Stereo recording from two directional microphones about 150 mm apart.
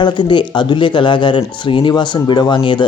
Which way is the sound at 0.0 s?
30° left (ahead or behind).